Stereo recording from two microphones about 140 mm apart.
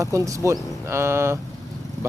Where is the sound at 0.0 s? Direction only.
20° right (ahead or behind).